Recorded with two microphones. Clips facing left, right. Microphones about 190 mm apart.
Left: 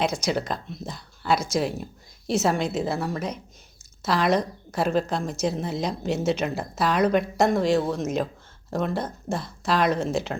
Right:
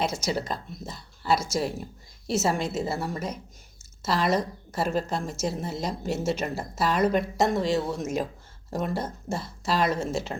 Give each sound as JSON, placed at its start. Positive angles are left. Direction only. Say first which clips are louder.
{"t": 0.0, "sound": "a woman's voice", "louder": "left 3 dB", "side_deg": -5}